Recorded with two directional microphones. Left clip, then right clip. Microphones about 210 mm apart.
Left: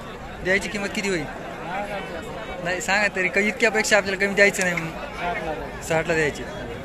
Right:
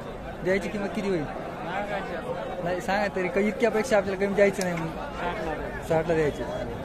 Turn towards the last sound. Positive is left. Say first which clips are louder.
# left 2 dB
turn(degrees=-5)  # may be behind; listen again after turning